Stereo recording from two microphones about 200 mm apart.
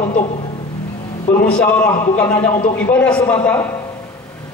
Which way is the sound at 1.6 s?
5° left (ahead or behind).